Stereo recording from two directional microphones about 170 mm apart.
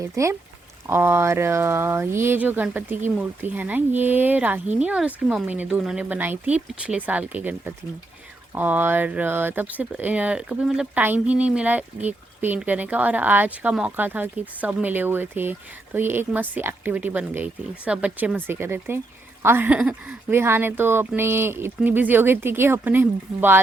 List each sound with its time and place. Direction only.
0.0 s speech: 20° right (ahead or behind)